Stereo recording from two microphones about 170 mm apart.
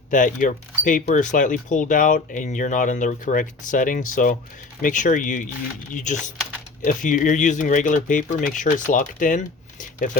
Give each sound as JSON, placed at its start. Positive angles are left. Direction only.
{"t": 0.1, "sound": "speech", "side_deg": 50}